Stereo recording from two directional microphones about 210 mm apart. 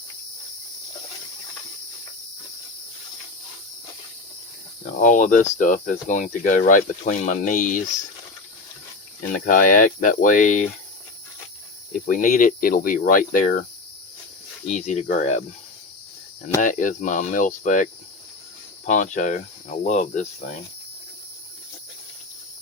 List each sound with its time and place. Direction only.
4.9 s speech: 35° left (ahead or behind)
9.5 s speech: 40° left (ahead or behind)
11.9 s speech: 40° left (ahead or behind)
14.8 s speech: 30° left (ahead or behind)
16.6 s speech: 35° left (ahead or behind)
18.9 s speech: 35° left (ahead or behind)